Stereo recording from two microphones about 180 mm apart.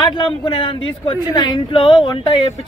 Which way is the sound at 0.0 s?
30° left (ahead or behind).